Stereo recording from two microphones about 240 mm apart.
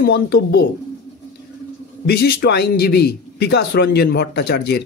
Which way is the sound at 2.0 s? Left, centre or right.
Left.